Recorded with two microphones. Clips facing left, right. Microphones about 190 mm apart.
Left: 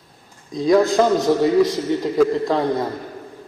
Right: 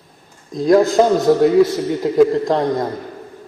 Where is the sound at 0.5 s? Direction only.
Centre (ahead or behind).